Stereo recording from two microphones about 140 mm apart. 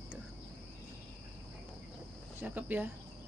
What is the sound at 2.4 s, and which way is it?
Speech, 10° right (ahead or behind).